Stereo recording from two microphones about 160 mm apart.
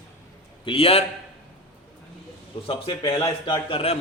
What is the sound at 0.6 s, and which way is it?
Speech, 35° left (ahead or behind).